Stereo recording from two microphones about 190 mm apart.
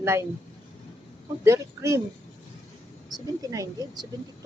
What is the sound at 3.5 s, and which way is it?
Speech, 20° right (ahead or behind).